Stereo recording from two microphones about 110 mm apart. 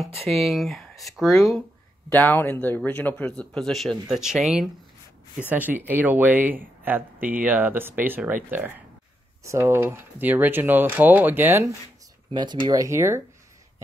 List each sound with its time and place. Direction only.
0.0 s speech: centre (ahead or behind)
2.0 s speech: 15° left (ahead or behind); by 4.6 s 5° right (ahead or behind)
5.5 s speech: 15° right (ahead or behind)
12.3 s speech: 40° right (ahead or behind)
12.6 s speech: 30° right (ahead or behind)